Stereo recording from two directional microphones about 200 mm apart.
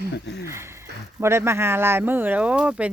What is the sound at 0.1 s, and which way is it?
Speech, 60° left (ahead or behind).